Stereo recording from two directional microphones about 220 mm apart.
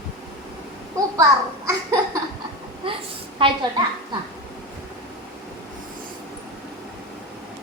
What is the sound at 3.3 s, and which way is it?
Speech, 20° right (ahead or behind).